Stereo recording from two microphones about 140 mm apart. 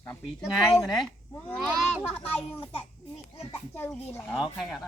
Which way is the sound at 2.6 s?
40° left (ahead or behind).